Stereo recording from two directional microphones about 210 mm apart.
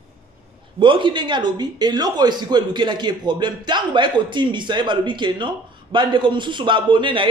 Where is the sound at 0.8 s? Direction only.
25° right (ahead or behind).